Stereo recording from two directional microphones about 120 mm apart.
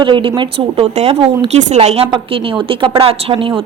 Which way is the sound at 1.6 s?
75° right (ahead or behind).